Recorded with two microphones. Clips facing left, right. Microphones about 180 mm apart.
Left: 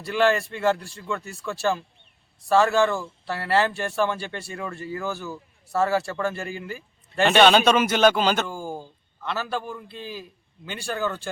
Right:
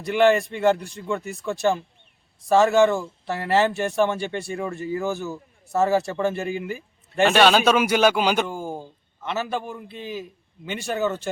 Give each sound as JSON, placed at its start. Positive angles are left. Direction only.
{"t": 0.0, "sound": "speech", "side_deg": -20}
{"t": 6.6, "sound": "a sound", "side_deg": -15}
{"t": 7.3, "sound": "a man's voice", "side_deg": 0}